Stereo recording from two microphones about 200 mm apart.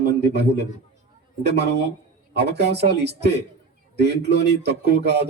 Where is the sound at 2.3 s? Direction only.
55° right (ahead or behind).